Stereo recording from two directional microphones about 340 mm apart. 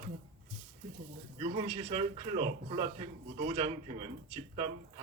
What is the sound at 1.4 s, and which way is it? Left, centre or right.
Speech, centre.